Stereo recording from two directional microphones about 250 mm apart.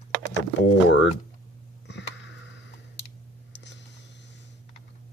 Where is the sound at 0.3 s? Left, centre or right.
Left.